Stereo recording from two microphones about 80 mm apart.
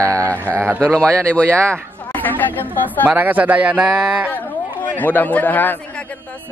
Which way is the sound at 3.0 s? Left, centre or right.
Centre.